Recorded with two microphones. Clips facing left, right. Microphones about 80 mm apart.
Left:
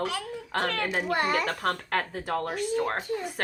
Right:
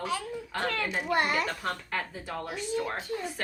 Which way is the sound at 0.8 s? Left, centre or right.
Left.